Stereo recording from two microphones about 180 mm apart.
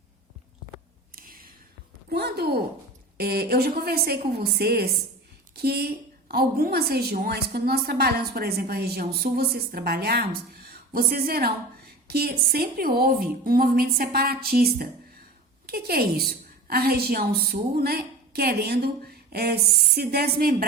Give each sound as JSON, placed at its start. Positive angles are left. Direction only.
{"t": 1.1, "sound": "whispering", "side_deg": -55}
{"t": 2.1, "sound": "a woman's voice", "side_deg": -65}